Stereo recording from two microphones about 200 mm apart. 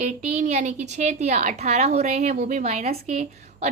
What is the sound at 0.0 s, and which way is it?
A woman's voice, 35° right (ahead or behind).